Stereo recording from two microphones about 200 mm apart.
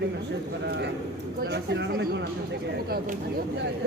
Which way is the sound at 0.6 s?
55° right (ahead or behind).